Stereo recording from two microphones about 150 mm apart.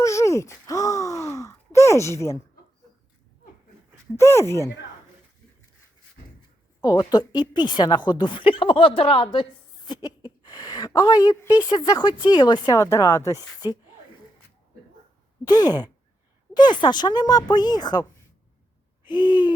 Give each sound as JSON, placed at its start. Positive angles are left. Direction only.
{"t": 0.0, "sound": "sigh", "side_deg": 20}
{"t": 4.2, "sound": "speech", "side_deg": 20}
{"t": 6.8, "sound": "a woman's voice", "side_deg": 25}
{"t": 15.4, "sound": "a woman's voice", "side_deg": 25}
{"t": 19.0, "sound": "hoot", "side_deg": 30}